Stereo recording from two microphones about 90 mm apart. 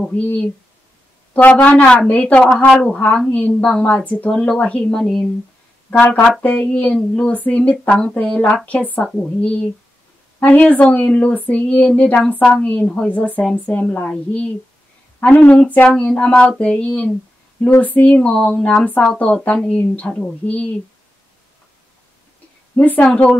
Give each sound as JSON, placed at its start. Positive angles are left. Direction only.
{"t": 0.0, "sound": "a woman's voice", "side_deg": 15}
{"t": 5.0, "sound": "speech", "side_deg": 5}
{"t": 5.9, "sound": "a woman's voice", "side_deg": 20}
{"t": 22.8, "sound": "a woman's voice", "side_deg": 20}